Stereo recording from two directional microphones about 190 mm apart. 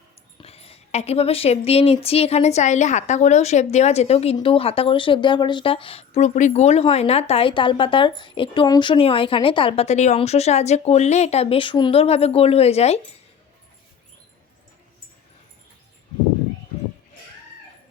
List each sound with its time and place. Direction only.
0.3 s speech: 30° left (ahead or behind)